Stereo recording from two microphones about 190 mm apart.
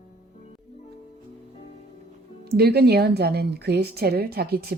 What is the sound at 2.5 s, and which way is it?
A woman's voice, 55° right (ahead or behind).